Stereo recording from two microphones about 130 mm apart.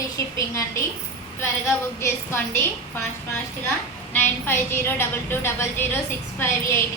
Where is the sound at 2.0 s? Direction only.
20° left (ahead or behind).